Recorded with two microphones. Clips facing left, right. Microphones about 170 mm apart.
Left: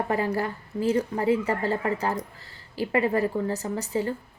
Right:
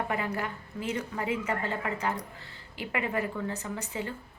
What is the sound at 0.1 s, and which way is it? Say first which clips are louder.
A woman's voice: left 6 dB; 35° left (ahead or behind).